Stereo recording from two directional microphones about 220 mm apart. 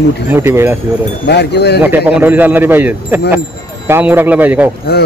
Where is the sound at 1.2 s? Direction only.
50° left (ahead or behind).